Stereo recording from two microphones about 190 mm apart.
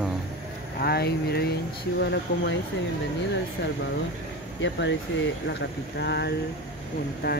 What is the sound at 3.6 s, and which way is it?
Speech, 70° left (ahead or behind).